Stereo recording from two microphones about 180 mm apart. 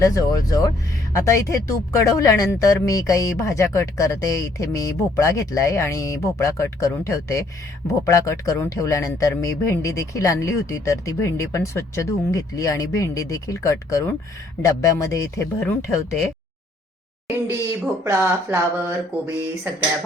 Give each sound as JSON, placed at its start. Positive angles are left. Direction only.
{"t": 0.0, "sound": "speech", "side_deg": 20}
{"t": 17.2, "sound": "speech", "side_deg": -15}